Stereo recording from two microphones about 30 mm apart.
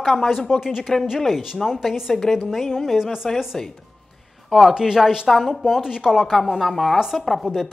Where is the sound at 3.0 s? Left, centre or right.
Centre.